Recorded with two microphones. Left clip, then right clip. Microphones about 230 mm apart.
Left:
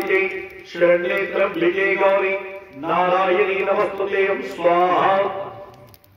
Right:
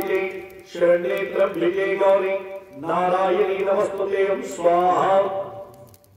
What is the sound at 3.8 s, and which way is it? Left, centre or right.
A man's voice, right.